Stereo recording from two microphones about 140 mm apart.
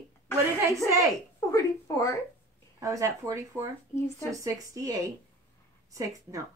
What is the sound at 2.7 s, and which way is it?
A woman's voice, 25° right (ahead or behind).